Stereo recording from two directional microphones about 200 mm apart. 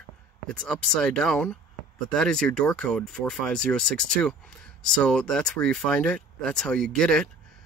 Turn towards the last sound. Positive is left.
turn(degrees=5)  # may be behind; listen again after turning